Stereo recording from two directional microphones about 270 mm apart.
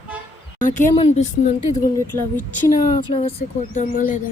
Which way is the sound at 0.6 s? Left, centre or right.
Left.